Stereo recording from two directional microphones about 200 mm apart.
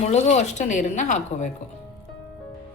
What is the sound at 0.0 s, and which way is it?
A woman's voice, 35° left (ahead or behind).